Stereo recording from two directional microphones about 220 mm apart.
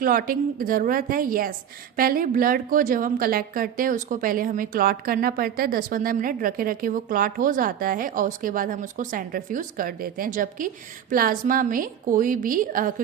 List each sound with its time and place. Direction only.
0.0 s a woman's voice: 40° right (ahead or behind)